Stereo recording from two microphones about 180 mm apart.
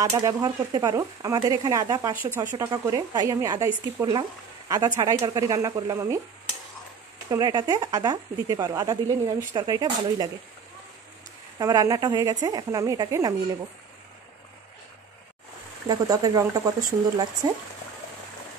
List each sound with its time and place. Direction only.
0.0 s speech: 20° right (ahead or behind)
7.2 s speech: 20° right (ahead or behind)
11.5 s speech: 20° right (ahead or behind)
15.9 s speech: 20° right (ahead or behind)